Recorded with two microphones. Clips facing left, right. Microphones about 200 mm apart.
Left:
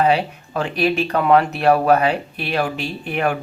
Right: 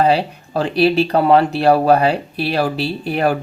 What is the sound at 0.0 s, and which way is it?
Speech, 35° right (ahead or behind).